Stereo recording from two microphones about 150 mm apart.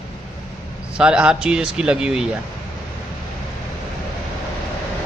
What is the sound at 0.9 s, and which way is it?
A man's voice, 5° right (ahead or behind).